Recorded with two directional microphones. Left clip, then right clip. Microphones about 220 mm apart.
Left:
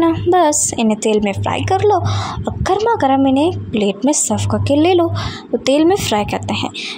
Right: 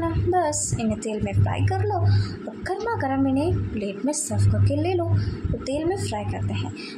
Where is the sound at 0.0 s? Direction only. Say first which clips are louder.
Left 10 dB; 40° left (ahead or behind).